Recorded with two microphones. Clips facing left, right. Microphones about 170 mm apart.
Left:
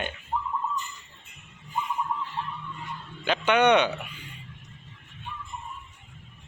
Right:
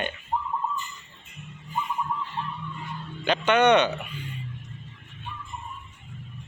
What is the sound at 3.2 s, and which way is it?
Speech, 10° left (ahead or behind).